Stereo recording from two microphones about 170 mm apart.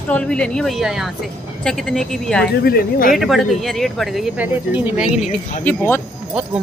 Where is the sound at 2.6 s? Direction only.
60° left (ahead or behind).